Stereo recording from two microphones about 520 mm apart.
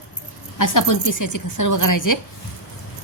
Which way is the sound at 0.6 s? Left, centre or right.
Left.